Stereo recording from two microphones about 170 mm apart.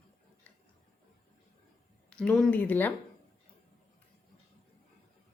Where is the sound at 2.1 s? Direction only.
5° left (ahead or behind).